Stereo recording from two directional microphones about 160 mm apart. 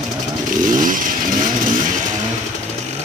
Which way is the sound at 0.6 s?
55° right (ahead or behind).